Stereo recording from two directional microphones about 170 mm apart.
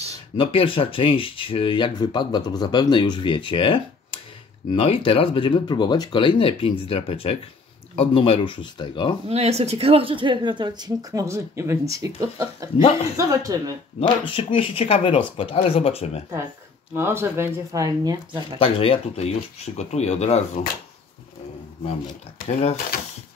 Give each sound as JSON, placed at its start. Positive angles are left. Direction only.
{"t": 0.4, "sound": "speech", "side_deg": 30}
{"t": 9.3, "sound": "speech", "side_deg": -40}
{"t": 13.9, "sound": "speech", "side_deg": 30}
{"t": 16.9, "sound": "speech", "side_deg": -15}
{"t": 18.6, "sound": "speech", "side_deg": 35}
{"t": 22.5, "sound": "speech", "side_deg": 40}